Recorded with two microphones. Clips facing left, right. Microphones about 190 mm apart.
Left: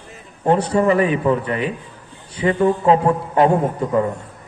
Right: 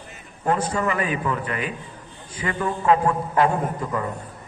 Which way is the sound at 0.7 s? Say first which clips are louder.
Left 8 dB; 30° left (ahead or behind).